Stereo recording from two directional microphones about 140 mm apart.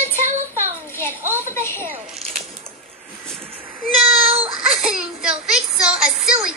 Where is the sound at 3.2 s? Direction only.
5° left (ahead or behind).